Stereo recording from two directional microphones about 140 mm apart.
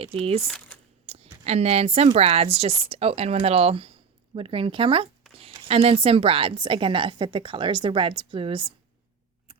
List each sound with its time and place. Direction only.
0.0 s speech: 40° right (ahead or behind)
0.4 s speech: 5° left (ahead or behind)
1.0 s a sound: 45° right (ahead or behind)
1.5 s a woman's voice: 50° right (ahead or behind)